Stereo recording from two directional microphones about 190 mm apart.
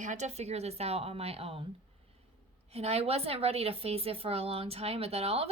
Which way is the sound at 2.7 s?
35° right (ahead or behind).